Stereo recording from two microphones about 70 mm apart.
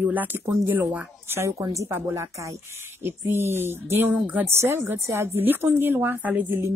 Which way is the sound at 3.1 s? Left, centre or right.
Right.